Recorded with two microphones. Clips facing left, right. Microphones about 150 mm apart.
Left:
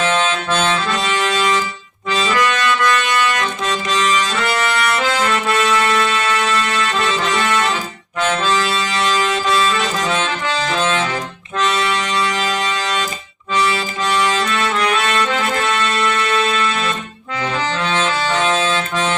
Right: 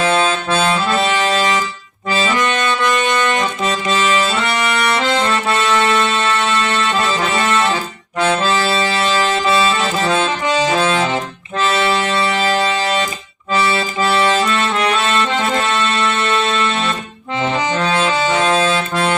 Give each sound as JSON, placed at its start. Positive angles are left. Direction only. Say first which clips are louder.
{"t": 0.0, "sound": "accordion", "louder": "right 2 dB", "side_deg": -35}
{"t": 2.3, "sound": "music", "louder": "left 3 dB", "side_deg": -25}
{"t": 3.7, "sound": "accordion", "louder": "even", "side_deg": -30}
{"t": 6.0, "sound": "music", "louder": "right 1 dB", "side_deg": -25}
{"t": 8.4, "sound": "accordion", "louder": "right 2 dB", "side_deg": -35}
{"t": 10.2, "sound": "accordion", "louder": "right 4 dB", "side_deg": -15}
{"t": 11.9, "sound": "music", "louder": "right 3 dB", "side_deg": -30}
{"t": 14.2, "sound": "accordion", "louder": "right 2 dB", "side_deg": -30}
{"t": 17.7, "sound": "saxophone", "louder": "right 3 dB", "side_deg": -35}
{"t": 18.0, "sound": "music", "louder": "right 3 dB", "side_deg": -15}
{"t": 18.4, "sound": "music", "louder": "right 2 dB", "side_deg": -35}